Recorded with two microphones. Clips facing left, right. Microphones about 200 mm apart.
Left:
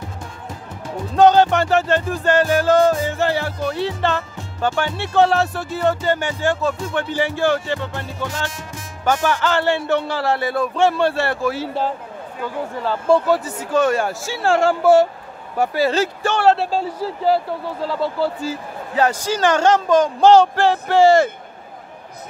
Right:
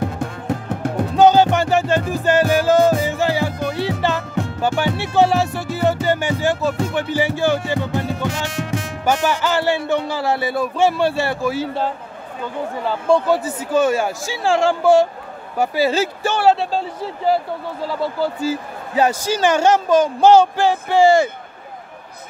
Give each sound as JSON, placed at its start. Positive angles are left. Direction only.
{"t": 0.0, "sound": "music", "side_deg": -65}
{"t": 1.1, "sound": "music", "side_deg": -5}
{"t": 5.0, "sound": "speech", "side_deg": -5}
{"t": 7.9, "sound": "music", "side_deg": -65}
{"t": 9.0, "sound": "speech", "side_deg": -5}